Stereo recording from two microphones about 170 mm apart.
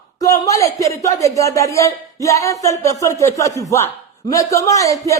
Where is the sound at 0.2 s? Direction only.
20° left (ahead or behind).